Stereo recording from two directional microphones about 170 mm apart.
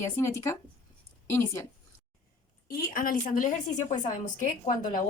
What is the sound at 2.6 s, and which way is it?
Speech, 60° left (ahead or behind).